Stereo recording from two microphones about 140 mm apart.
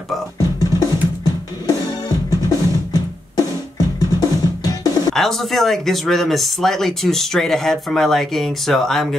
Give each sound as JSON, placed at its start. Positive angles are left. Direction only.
{"t": 0.4, "sound": "music", "side_deg": 25}
{"t": 2.9, "sound": "music", "side_deg": 25}
{"t": 5.1, "sound": "speech", "side_deg": 0}